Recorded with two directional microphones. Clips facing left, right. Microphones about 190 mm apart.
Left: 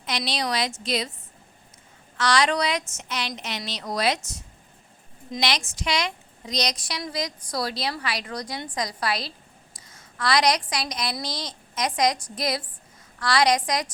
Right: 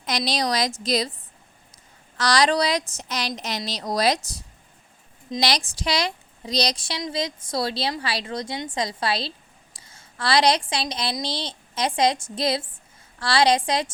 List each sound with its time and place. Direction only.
0.0 s speech: 40° right (ahead or behind)
2.1 s a woman's voice: 35° right (ahead or behind)